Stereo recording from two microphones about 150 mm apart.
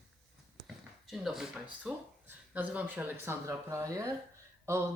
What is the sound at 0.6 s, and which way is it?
Speech, centre (ahead or behind).